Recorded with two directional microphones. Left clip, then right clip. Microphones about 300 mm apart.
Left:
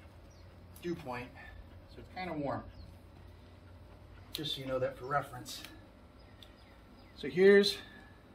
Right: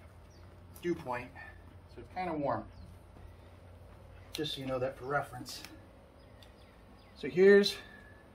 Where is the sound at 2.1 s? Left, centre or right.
Centre.